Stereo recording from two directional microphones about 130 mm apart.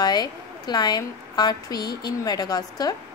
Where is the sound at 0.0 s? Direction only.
30° left (ahead or behind).